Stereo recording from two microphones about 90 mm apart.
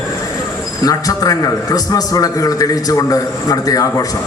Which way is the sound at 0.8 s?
40° left (ahead or behind).